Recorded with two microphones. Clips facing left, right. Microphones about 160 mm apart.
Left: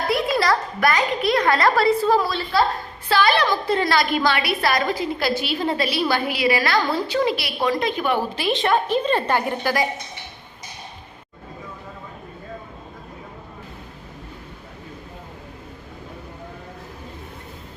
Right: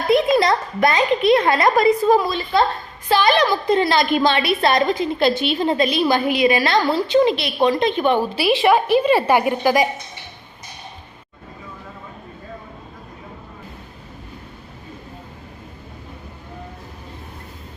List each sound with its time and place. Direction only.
0.1 s a child's voice: 20° right (ahead or behind)
8.4 s a woman's voice: 10° right (ahead or behind)